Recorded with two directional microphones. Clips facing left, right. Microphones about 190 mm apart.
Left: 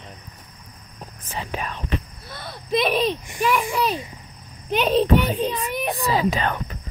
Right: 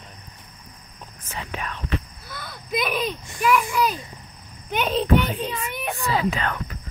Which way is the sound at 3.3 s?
30° left (ahead or behind).